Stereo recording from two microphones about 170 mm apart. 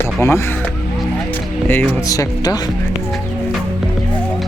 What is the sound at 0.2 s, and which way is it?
Speech, 15° left (ahead or behind).